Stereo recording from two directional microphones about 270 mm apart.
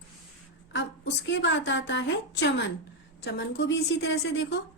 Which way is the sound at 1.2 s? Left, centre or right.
Left.